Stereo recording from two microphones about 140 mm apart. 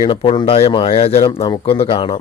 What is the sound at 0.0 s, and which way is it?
Speech, 35° left (ahead or behind).